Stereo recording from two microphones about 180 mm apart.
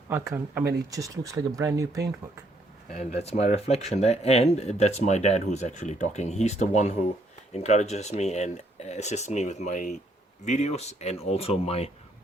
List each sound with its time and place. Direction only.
0.1 s speech: 15° right (ahead or behind)
3.2 s speech: 35° left (ahead or behind)